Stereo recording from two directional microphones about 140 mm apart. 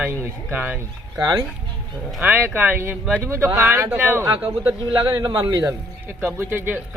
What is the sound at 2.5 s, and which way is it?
Speech, 15° right (ahead or behind).